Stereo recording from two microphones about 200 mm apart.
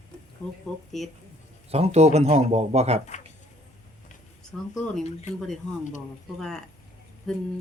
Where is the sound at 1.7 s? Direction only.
30° right (ahead or behind).